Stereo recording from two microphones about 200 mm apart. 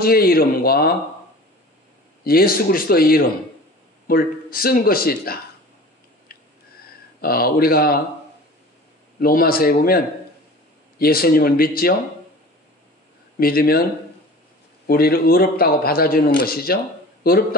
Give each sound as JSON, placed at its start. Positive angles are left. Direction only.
{"t": 0.0, "sound": "a man's voice", "side_deg": 50}
{"t": 2.2, "sound": "a man's voice", "side_deg": 50}
{"t": 7.2, "sound": "a man's voice", "side_deg": 50}
{"t": 9.2, "sound": "a man's voice", "side_deg": 45}
{"t": 13.4, "sound": "a man's voice", "side_deg": 50}
{"t": 14.9, "sound": "a man's voice", "side_deg": 50}